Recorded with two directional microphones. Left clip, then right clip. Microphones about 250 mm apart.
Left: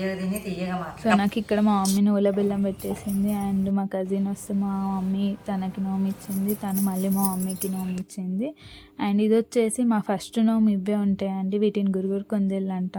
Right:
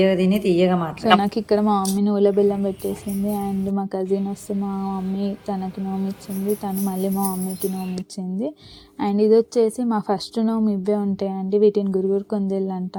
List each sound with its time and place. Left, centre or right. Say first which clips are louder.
0.0 s speech: right 12 dB; right
1.2 s speech: right 4 dB; centre
9.0 s speech: right 6 dB; centre